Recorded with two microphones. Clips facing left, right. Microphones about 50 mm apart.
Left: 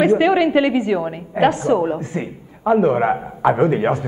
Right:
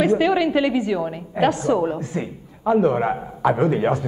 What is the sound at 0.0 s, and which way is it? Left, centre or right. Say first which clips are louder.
A woman's voice: left 3 dB; left.